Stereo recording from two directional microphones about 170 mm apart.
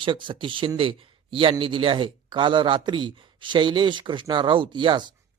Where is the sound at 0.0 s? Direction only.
30° right (ahead or behind).